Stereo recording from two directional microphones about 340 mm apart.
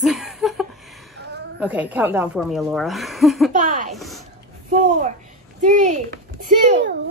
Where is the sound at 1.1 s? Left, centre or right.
Right.